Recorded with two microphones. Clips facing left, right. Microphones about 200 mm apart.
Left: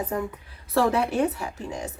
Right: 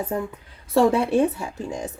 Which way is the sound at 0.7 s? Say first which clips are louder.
Right 4 dB; 25° right (ahead or behind).